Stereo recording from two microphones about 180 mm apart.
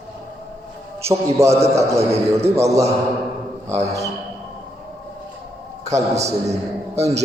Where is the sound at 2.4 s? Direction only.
35° right (ahead or behind).